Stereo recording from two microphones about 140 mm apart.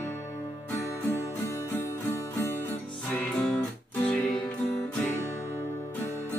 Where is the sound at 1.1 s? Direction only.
20° left (ahead or behind).